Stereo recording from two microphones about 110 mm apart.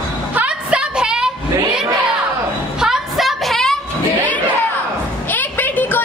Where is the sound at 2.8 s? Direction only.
5° right (ahead or behind).